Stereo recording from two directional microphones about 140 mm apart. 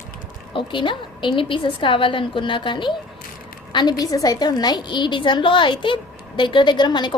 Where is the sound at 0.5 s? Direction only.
35° left (ahead or behind).